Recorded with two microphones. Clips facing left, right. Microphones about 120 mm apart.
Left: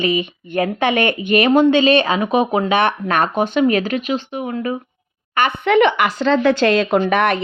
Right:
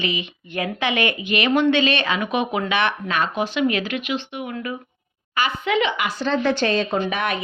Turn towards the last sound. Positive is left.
turn(degrees=80)